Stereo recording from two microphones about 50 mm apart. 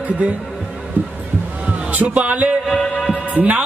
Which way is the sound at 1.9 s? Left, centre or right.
Right.